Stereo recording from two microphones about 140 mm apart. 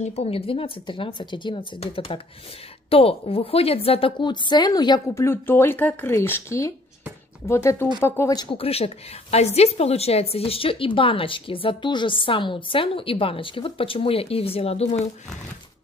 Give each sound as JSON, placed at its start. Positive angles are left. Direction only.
{"t": 0.0, "sound": "a woman's voice", "side_deg": 50}
{"t": 8.4, "sound": "a woman's voice", "side_deg": 40}